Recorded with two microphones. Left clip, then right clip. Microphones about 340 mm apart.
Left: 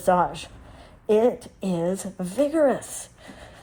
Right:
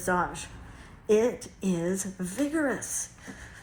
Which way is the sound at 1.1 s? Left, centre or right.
Centre.